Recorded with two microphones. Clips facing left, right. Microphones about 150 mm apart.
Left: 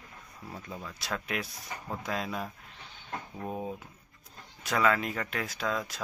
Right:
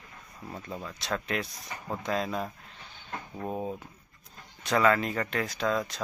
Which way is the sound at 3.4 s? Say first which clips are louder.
Right 3 dB; 10° right (ahead or behind).